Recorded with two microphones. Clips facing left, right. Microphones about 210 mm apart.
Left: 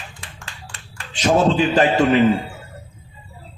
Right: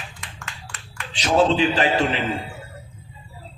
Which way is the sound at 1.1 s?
50° left (ahead or behind).